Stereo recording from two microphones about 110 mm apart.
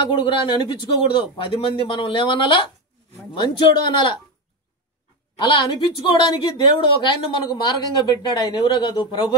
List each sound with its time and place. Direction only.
0.3 s a woman's voice: 45° left (ahead or behind)
5.4 s a woman's voice: 45° left (ahead or behind)